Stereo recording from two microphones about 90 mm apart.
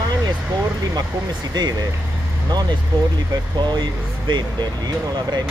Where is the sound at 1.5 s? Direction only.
45° right (ahead or behind).